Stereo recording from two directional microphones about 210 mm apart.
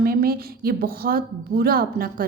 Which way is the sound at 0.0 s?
45° right (ahead or behind).